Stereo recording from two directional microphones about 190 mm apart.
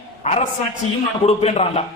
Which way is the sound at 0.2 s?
35° left (ahead or behind).